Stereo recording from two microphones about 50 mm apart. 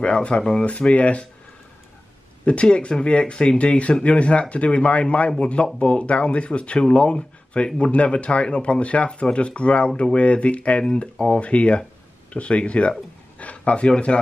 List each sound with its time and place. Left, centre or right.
0.0 s speech: left
2.4 s speech: left